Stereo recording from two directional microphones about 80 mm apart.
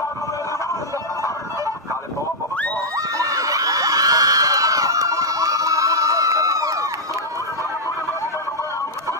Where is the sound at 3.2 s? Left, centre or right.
Right.